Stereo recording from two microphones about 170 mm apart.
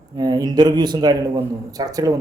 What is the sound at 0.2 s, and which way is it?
Speech, 25° right (ahead or behind).